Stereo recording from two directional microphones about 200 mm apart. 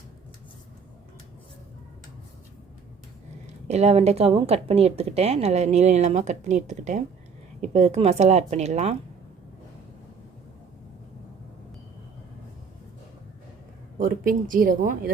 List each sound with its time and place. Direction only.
3.4 s speech: 35° right (ahead or behind)
14.0 s speech: 40° right (ahead or behind)